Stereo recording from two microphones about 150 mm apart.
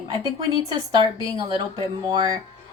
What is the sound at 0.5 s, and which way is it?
A woman's voice, 25° right (ahead or behind).